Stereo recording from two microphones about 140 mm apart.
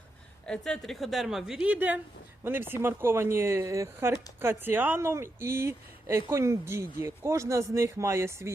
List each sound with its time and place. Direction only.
0.4 s speech: 5° left (ahead or behind); by 8.5 s 20° right (ahead or behind)